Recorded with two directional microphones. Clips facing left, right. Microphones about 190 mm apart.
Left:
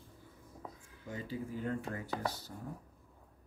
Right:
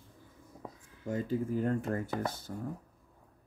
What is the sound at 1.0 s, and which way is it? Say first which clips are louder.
Speech: right 8 dB; 45° right (ahead or behind).